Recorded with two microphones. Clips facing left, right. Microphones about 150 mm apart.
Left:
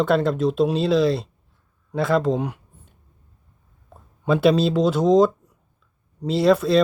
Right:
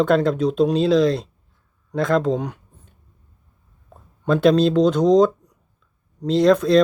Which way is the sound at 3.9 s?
5° left (ahead or behind).